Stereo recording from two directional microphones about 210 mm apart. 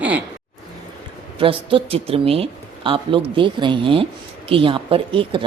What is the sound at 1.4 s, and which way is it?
Speech, 25° right (ahead or behind).